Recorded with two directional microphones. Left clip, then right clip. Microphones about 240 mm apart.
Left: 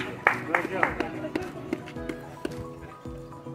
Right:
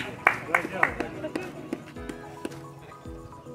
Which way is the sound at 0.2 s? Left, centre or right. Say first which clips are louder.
Right 1 dB; centre.